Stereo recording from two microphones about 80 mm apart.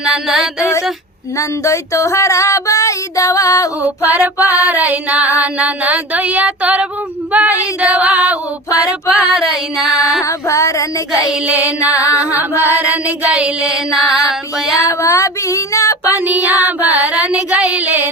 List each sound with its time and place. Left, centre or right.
0.0 s music: centre
0.6 s female singing: left
4.0 s a sound: right
7.8 s female singing: centre
8.8 s music: centre
10.2 s female singing: left
11.3 s a sound: centre
11.9 s music: left
12.4 s a sound: right
13.1 s music: centre
14.8 s child singing: left
16.2 s a sound: right